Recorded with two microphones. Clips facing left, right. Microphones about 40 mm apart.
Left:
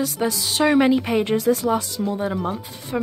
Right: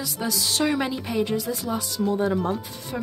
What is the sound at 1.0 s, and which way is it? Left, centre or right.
Speech, left.